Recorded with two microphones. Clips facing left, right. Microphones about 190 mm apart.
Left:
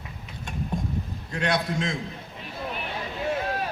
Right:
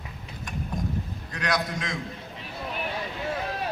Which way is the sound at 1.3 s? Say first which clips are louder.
Left 3 dB; 25° left (ahead or behind).